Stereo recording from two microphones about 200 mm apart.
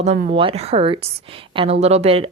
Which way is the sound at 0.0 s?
35° right (ahead or behind).